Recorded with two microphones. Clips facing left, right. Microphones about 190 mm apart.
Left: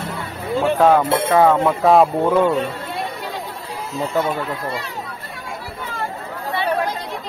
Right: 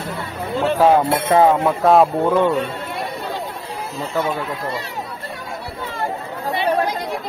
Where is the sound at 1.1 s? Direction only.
20° right (ahead or behind).